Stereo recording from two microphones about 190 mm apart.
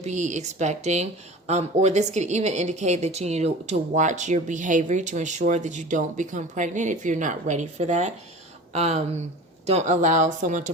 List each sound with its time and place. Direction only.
0.0 s speech: 40° right (ahead or behind)